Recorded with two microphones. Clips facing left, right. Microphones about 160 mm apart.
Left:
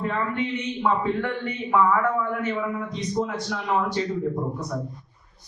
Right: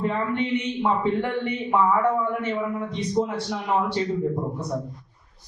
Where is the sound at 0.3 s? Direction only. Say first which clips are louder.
Right 3 dB; 25° right (ahead or behind).